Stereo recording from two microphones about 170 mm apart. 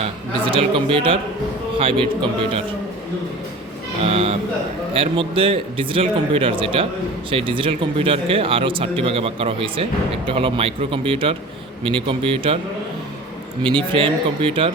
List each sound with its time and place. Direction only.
0.5 s speech: 30° right (ahead or behind)
4.0 s speech: 35° right (ahead or behind)
13.9 s speech: 30° right (ahead or behind)